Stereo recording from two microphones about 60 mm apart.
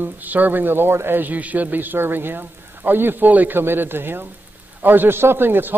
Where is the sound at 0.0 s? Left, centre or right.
Right.